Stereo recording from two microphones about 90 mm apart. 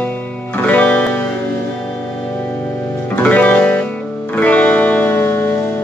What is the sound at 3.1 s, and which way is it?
Music, 15° left (ahead or behind).